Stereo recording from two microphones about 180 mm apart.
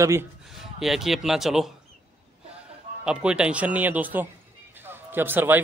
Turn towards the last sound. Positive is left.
turn(degrees=-10)  # may be behind; listen again after turning